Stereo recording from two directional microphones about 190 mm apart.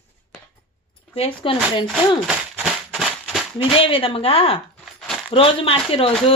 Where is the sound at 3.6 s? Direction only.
30° left (ahead or behind).